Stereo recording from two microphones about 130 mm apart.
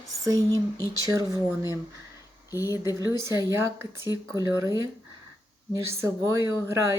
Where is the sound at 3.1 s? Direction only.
20° right (ahead or behind).